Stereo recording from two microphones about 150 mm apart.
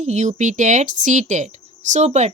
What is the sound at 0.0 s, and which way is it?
Speech, 50° right (ahead or behind).